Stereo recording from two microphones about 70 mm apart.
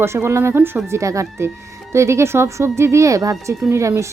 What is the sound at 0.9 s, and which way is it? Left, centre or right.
Speech, right.